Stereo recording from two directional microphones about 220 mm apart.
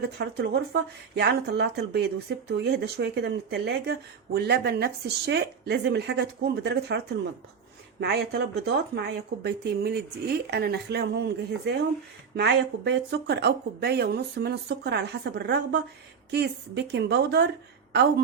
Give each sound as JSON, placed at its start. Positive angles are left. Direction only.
{"t": 0.2, "sound": "speech", "side_deg": -50}
{"t": 8.0, "sound": "speech", "side_deg": -50}